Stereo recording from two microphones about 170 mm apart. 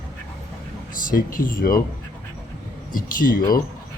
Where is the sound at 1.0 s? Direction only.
55° left (ahead or behind).